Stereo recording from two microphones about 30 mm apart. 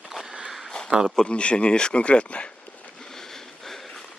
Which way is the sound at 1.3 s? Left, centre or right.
Left.